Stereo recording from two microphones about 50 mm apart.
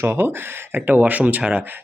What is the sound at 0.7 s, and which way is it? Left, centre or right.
Speech, right.